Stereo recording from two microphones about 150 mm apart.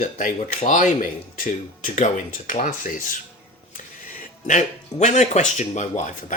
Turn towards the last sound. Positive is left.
turn(degrees=55)  # may be behind; listen again after turning